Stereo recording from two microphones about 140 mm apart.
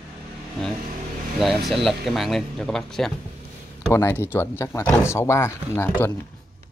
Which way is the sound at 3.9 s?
20° left (ahead or behind).